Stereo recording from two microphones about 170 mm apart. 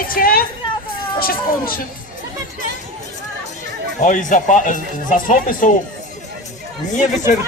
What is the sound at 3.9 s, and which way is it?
A man's voice, 45° left (ahead or behind).